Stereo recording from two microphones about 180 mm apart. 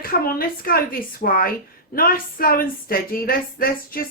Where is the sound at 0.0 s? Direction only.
55° left (ahead or behind).